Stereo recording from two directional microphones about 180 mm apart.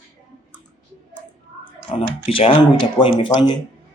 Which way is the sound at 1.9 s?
30° left (ahead or behind).